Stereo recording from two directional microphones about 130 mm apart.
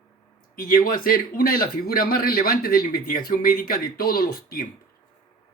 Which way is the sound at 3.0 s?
90° left.